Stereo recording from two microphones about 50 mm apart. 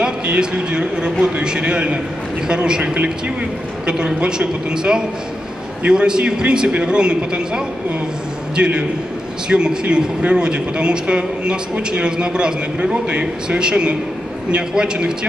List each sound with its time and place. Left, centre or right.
0.0 s a man's voice: centre